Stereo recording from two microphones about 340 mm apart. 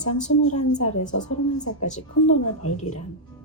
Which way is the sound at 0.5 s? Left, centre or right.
Centre.